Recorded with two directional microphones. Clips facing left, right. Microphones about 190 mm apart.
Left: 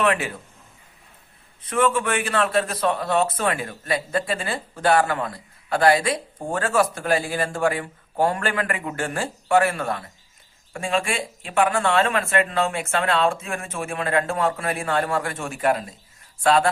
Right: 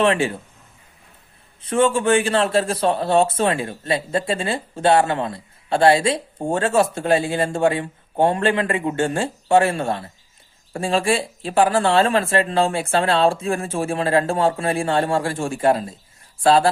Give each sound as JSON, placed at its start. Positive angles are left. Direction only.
{"t": 0.0, "sound": "a man's voice", "side_deg": -30}
{"t": 1.6, "sound": "a man's voice", "side_deg": -30}